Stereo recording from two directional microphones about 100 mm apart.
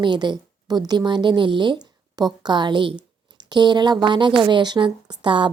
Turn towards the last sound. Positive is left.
turn(degrees=-55)  # may be behind; listen again after turning